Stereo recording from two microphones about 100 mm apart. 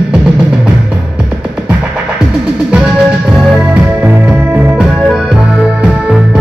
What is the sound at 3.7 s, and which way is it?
Music, 20° right (ahead or behind).